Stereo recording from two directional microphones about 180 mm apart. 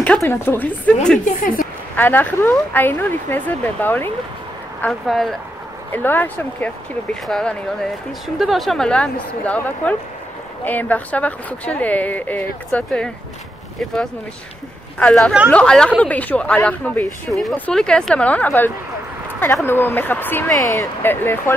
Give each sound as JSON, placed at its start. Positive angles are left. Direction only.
{"t": 0.2, "sound": "speech", "side_deg": 15}
{"t": 1.2, "sound": "speech", "side_deg": 50}
{"t": 2.0, "sound": "speech", "side_deg": 10}
{"t": 15.0, "sound": "speech", "side_deg": 5}